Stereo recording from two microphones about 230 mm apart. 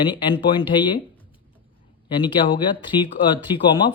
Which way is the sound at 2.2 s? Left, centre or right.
Left.